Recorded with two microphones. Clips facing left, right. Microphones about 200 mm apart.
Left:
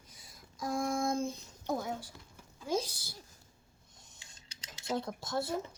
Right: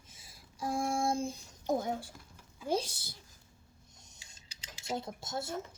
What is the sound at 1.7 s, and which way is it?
Speech, 45° right (ahead or behind).